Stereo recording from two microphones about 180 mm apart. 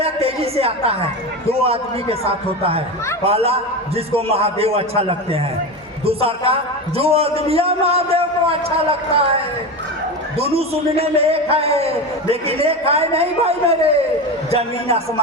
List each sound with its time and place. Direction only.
0.0 s a sound: 35° right (ahead or behind)
1.5 s a man's voice: 35° right (ahead or behind)
10.3 s a man's voice: 35° right (ahead or behind)